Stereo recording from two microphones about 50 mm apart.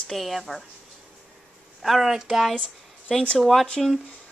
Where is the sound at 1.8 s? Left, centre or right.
Centre.